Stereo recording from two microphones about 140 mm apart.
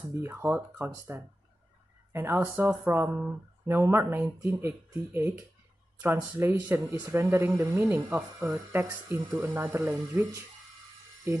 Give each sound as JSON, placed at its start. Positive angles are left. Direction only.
{"t": 0.1, "sound": "speech", "side_deg": -15}
{"t": 6.4, "sound": "speech", "side_deg": -20}